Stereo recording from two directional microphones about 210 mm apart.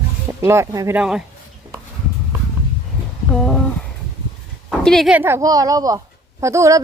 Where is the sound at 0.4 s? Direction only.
15° right (ahead or behind).